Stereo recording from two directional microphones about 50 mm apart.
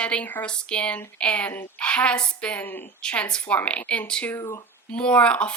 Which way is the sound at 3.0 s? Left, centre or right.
Left.